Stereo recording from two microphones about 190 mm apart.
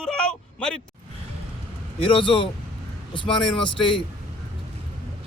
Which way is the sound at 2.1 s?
30° left (ahead or behind).